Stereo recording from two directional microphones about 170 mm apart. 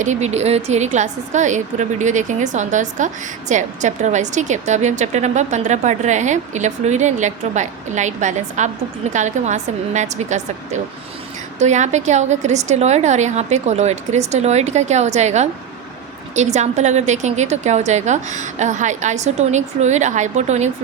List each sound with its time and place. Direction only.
0.0 s a woman's voice: 45° right (ahead or behind)